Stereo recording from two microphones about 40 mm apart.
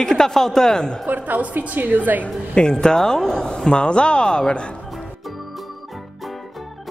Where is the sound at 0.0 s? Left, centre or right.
Centre.